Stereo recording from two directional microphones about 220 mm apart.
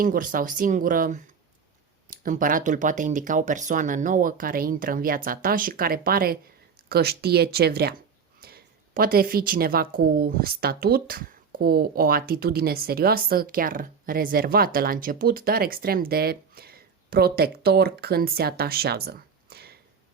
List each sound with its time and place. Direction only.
0.0 s a woman's voice: 40° right (ahead or behind)